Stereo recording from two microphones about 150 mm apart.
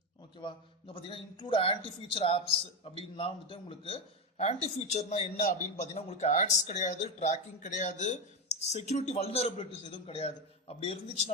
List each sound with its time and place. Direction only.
0.4 s a man's voice: 35° left (ahead or behind)